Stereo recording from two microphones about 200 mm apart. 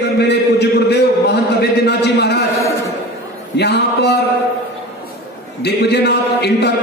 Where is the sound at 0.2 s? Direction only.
60° left (ahead or behind).